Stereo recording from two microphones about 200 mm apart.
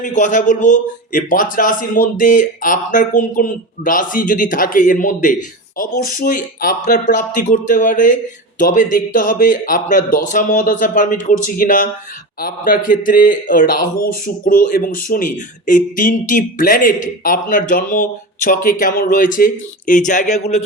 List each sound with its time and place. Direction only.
0.0 s a man's voice: 40° left (ahead or behind)